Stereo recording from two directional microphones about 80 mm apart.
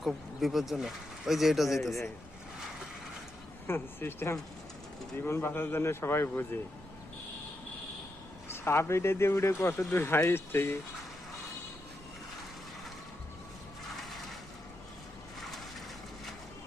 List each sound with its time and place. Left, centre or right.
0.0 s speech: centre
3.7 s speech: left
8.4 s speech: left
13.9 s a sound: centre